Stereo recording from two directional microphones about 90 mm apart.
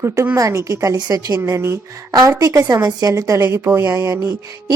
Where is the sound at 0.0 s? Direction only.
35° right (ahead or behind).